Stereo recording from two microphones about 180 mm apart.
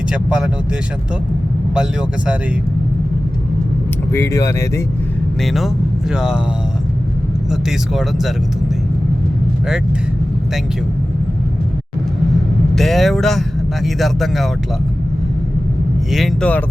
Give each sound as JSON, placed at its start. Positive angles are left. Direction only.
{"t": 0.1, "sound": "speech", "side_deg": -5}
{"t": 1.7, "sound": "speech", "side_deg": -5}
{"t": 4.1, "sound": "speech", "side_deg": 15}
{"t": 5.5, "sound": "speech", "side_deg": 0}
{"t": 7.5, "sound": "speech", "side_deg": 0}
{"t": 12.7, "sound": "speech", "side_deg": 0}
{"t": 16.1, "sound": "speech", "side_deg": 5}